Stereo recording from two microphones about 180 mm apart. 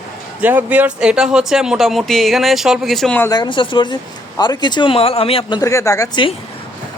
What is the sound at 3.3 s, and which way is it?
Speech, 25° left (ahead or behind).